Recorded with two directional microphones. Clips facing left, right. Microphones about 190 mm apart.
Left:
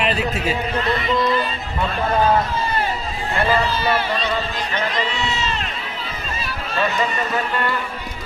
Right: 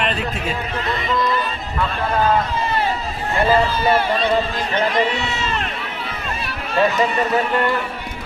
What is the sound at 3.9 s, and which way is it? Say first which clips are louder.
Speech: right 4 dB; 50° right (ahead or behind).